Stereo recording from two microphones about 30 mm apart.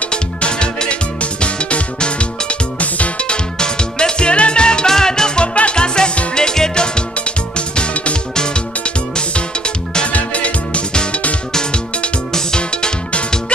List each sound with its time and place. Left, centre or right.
0.1 s music: left
2.8 s music: left
3.3 s music: left
4.8 s music: centre
5.4 s music: left
8.4 s music: left
10.1 s music: left
12.5 s music: left